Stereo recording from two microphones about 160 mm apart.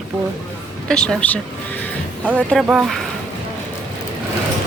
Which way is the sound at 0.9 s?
5° left (ahead or behind).